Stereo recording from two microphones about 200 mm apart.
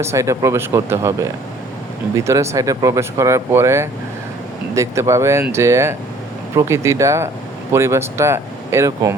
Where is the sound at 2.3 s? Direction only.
15° right (ahead or behind).